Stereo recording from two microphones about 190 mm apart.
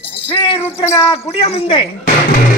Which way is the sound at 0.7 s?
15° left (ahead or behind).